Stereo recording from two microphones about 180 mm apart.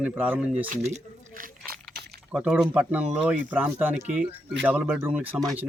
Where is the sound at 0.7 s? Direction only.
45° right (ahead or behind).